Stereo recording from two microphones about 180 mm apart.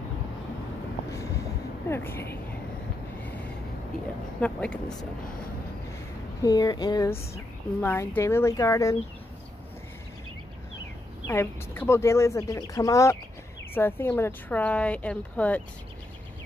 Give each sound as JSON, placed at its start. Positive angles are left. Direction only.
{"t": 1.9, "sound": "a woman's voice", "side_deg": 15}
{"t": 4.4, "sound": "a woman's voice", "side_deg": 5}
{"t": 6.4, "sound": "a woman's voice", "side_deg": 20}
{"t": 11.2, "sound": "a woman's voice", "side_deg": 15}